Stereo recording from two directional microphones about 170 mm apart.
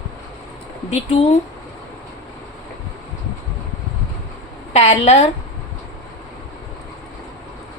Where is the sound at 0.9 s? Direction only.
40° left (ahead or behind).